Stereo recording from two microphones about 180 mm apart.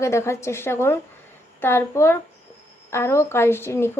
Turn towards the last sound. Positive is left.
turn(degrees=15)  # may be behind; listen again after turning